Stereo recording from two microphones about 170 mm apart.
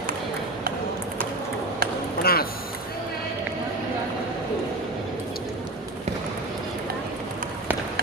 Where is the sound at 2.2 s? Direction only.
60° left (ahead or behind).